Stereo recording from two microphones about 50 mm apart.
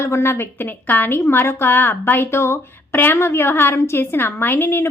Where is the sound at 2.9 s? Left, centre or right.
Left.